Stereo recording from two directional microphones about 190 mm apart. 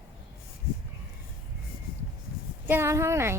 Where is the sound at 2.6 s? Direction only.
10° right (ahead or behind).